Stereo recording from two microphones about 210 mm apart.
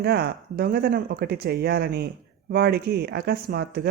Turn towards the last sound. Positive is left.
turn(degrees=-50)  # may be behind; listen again after turning